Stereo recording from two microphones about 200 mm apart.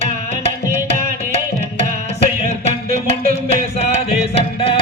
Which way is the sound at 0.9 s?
30° left (ahead or behind).